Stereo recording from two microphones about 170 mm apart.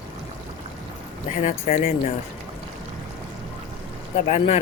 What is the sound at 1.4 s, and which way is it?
Speech, 45° left (ahead or behind).